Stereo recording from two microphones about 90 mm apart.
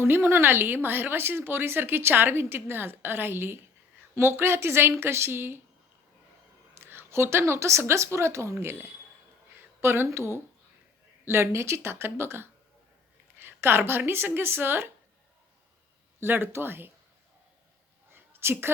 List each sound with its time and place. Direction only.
0.0 s speech: 25° right (ahead or behind)
6.7 s speech: 30° right (ahead or behind)
16.2 s speech: 25° right (ahead or behind)
18.1 s a sound: 25° right (ahead or behind)